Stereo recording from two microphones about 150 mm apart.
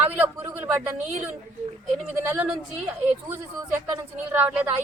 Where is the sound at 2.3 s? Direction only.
10° right (ahead or behind).